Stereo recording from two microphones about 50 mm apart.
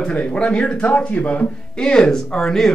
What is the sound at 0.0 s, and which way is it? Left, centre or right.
Speech, left.